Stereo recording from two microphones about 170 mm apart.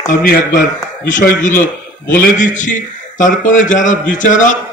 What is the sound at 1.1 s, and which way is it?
A man's voice, 50° left (ahead or behind).